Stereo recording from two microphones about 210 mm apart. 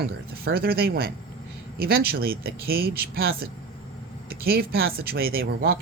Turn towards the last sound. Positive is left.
turn(degrees=-45)  # may be behind; listen again after turning